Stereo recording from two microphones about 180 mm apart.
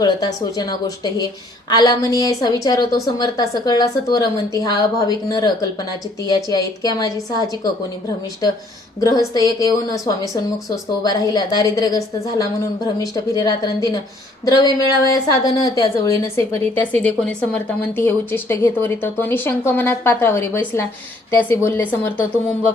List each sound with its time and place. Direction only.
0.0 s a woman's voice: 20° left (ahead or behind)
9.0 s a woman's voice: 20° left (ahead or behind)